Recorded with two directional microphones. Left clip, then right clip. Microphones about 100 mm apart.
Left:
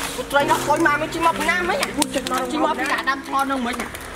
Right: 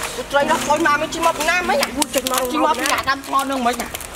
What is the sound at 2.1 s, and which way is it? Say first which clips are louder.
Speech: right 5 dB; 25° right (ahead or behind).